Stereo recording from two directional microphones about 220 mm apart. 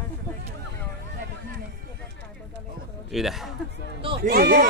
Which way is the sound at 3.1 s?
Centre (ahead or behind).